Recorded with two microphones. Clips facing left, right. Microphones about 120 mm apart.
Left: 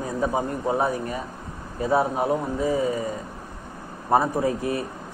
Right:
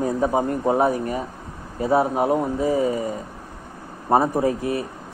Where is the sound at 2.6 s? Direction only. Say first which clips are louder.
Right 3 dB; 30° right (ahead or behind).